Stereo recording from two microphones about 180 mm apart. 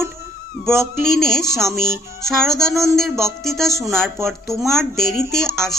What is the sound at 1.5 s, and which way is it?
Speech, 15° right (ahead or behind).